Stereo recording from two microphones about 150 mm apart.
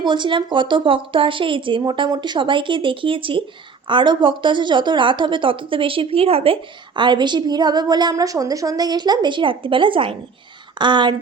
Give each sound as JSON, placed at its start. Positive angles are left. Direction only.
{"t": 0.0, "sound": "speech", "side_deg": -30}